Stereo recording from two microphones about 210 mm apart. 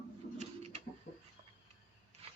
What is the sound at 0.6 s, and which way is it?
Pigeon, 30° right (ahead or behind).